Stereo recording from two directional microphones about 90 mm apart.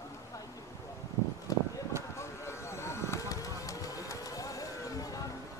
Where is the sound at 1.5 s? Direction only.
40° left (ahead or behind).